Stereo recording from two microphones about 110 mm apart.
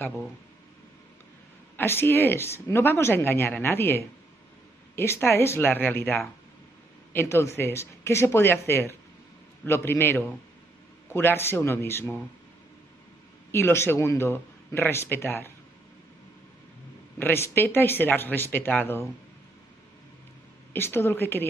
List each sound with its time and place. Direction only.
1.8 s speech: 20° left (ahead or behind)
13.5 s speech: 20° left (ahead or behind)
17.2 s speech: 20° left (ahead or behind)
20.7 s speech: 20° left (ahead or behind)